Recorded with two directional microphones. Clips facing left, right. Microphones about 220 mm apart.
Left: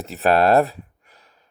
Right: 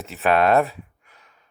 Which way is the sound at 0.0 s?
35° left (ahead or behind).